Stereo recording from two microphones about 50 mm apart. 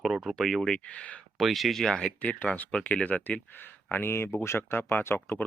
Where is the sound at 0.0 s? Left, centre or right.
Centre.